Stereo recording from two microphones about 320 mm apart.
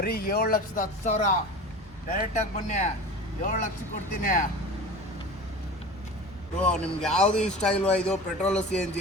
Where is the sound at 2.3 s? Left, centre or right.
Left.